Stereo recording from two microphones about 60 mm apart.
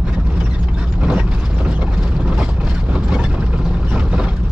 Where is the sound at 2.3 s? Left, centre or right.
Centre.